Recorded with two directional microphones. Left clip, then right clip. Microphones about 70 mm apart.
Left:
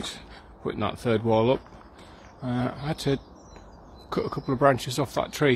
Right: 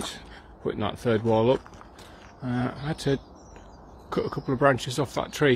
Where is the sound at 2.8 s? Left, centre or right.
Left.